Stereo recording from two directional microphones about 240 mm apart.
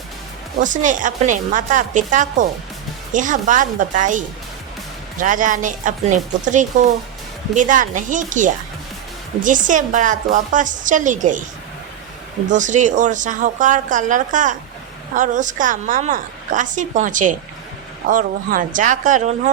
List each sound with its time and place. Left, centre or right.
0.6 s a woman's voice: right
12.5 s a woman's voice: right